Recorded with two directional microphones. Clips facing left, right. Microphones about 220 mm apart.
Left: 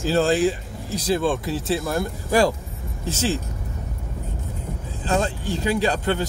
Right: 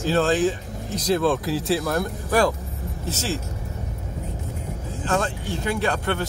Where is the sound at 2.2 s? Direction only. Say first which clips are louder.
Left 2 dB; 10° left (ahead or behind).